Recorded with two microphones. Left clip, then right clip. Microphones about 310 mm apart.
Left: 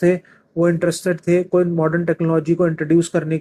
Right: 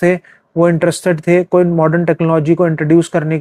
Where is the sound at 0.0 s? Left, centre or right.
Right.